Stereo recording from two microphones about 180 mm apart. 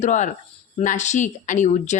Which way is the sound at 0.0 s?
40° left (ahead or behind).